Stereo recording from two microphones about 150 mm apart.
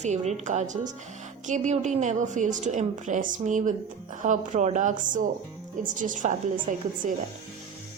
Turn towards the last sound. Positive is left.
turn(degrees=-55)  # may be behind; listen again after turning